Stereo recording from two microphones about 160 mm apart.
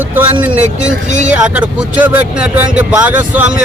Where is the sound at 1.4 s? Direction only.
10° right (ahead or behind).